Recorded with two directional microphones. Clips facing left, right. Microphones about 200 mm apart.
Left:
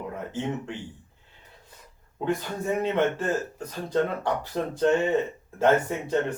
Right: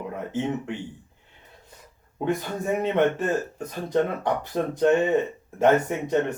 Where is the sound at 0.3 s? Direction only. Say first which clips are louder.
Right 4 dB; 20° right (ahead or behind).